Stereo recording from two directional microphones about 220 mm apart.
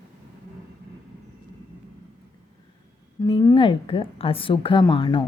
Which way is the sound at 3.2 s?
15° left (ahead or behind).